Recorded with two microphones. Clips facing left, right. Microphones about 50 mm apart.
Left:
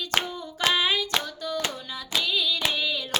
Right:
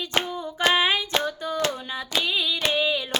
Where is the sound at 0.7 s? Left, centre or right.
Right.